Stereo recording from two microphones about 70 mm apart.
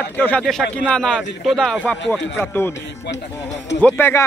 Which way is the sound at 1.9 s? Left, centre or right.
Left.